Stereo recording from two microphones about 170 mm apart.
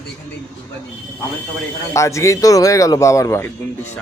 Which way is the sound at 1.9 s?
20° left (ahead or behind).